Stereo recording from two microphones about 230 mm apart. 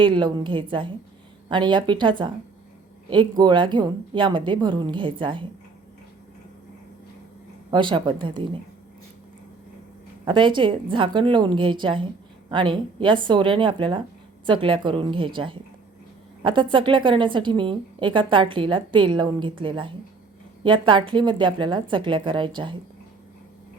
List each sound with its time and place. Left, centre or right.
0.0 s a woman's voice: centre
7.7 s a woman's voice: right
10.2 s a woman's voice: right